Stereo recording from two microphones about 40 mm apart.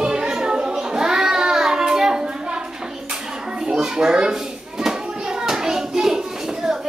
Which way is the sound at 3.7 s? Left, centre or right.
Centre.